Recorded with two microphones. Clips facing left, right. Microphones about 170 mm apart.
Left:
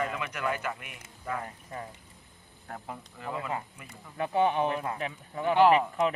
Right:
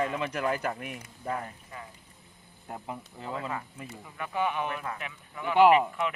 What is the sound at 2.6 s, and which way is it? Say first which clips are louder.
Speech: right 2 dB; 20° right (ahead or behind).